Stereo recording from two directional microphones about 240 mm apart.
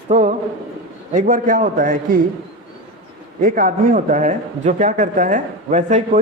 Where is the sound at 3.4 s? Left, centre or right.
Right.